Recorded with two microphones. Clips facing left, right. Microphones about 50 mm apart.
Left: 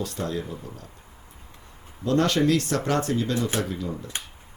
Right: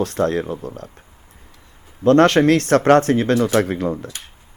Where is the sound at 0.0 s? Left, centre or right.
Right.